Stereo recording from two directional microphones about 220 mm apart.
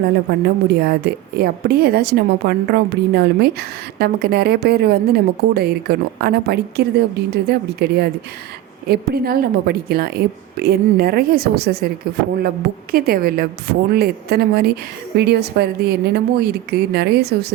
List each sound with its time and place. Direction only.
0.3 s a woman's voice: 50° right (ahead or behind)
12.9 s a woman's voice: 45° right (ahead or behind)